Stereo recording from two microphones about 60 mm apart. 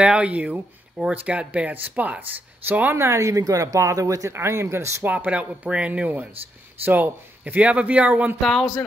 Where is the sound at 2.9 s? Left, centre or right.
Right.